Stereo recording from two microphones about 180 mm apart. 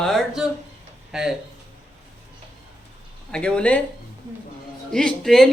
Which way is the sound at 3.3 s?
5° left (ahead or behind).